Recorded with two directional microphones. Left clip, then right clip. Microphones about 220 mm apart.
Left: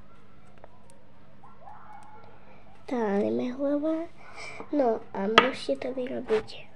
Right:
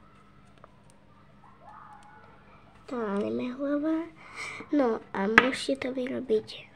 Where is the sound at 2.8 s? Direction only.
10° left (ahead or behind).